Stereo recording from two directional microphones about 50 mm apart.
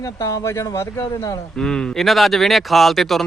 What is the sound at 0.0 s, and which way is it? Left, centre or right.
Speech, left.